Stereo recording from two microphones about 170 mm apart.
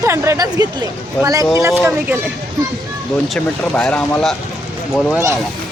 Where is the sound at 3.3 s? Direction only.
5° left (ahead or behind).